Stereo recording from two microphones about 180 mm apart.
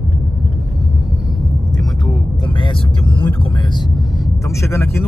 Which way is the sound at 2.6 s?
30° left (ahead or behind).